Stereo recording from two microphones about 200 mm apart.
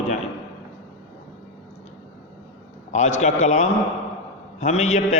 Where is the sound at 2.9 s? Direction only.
35° left (ahead or behind).